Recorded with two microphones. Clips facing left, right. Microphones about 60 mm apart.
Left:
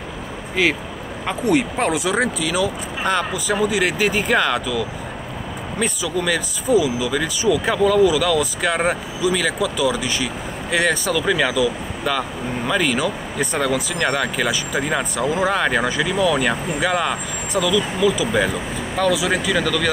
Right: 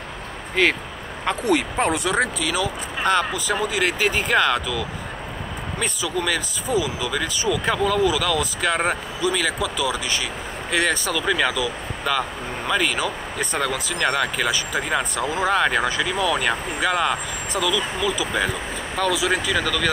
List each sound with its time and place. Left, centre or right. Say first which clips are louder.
0.6 s speech: even; centre
4.3 s speech: right 1 dB; left
5.8 s speech: left 3 dB; centre